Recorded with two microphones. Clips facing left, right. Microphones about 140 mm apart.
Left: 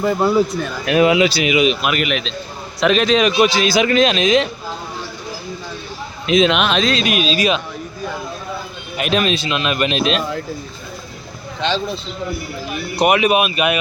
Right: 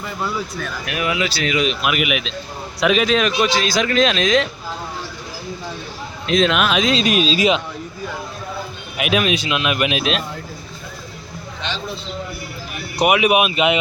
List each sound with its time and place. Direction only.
0.0 s speech: 45° left (ahead or behind)
0.6 s a man's voice: 25° left (ahead or behind); by 3.3 s centre (ahead or behind)
3.3 s a man's voice: 10° left (ahead or behind)
6.2 s a man's voice: 5° left (ahead or behind)
7.0 s speech: 35° right (ahead or behind)
9.0 s a man's voice: 5° right (ahead or behind)
13.0 s a man's voice: 5° right (ahead or behind)